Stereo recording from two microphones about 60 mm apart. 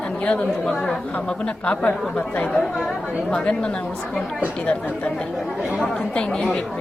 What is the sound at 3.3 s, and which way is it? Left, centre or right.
A woman's voice, centre.